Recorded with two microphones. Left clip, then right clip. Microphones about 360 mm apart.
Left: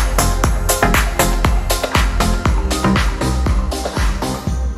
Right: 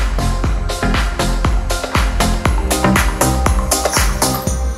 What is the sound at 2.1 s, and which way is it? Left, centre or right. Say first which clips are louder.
Music: right 1 dB; centre.